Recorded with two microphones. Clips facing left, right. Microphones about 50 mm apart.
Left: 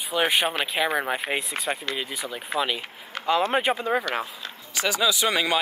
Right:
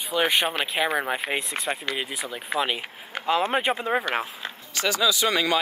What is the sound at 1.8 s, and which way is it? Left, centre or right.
Speech, centre.